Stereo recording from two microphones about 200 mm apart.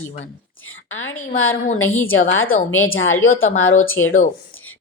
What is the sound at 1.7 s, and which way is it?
Speech, 10° left (ahead or behind).